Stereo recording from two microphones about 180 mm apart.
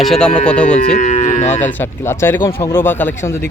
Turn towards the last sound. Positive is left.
turn(degrees=10)  # may be behind; listen again after turning